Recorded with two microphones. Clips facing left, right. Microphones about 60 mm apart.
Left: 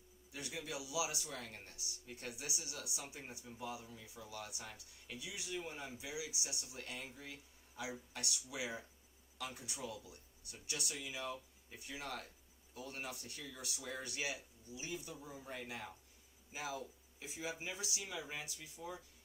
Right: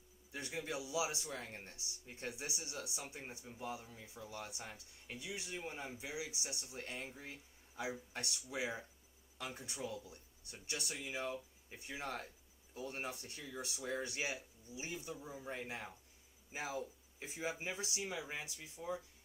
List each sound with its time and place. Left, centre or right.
0.3 s speech: right